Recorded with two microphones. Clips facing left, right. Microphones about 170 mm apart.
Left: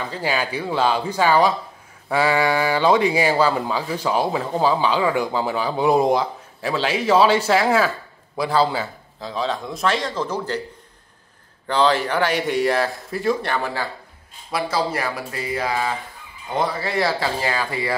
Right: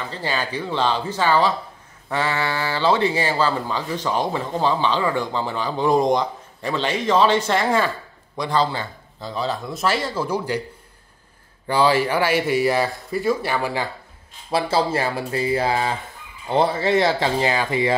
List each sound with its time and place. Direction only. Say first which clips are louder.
0.1 s a man's voice: left 2 dB; 10° left (ahead or behind); by 10.6 s 10° right (ahead or behind)
11.6 s a man's voice: right 1 dB; 10° right (ahead or behind)
14.5 s speech: right 3 dB; 25° right (ahead or behind)